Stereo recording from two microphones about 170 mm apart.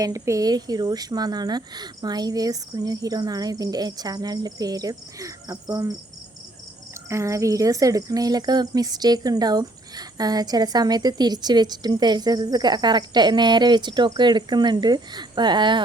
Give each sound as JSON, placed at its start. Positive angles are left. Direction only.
{"t": 0.0, "sound": "speech", "side_deg": -20}
{"t": 7.1, "sound": "speech", "side_deg": -15}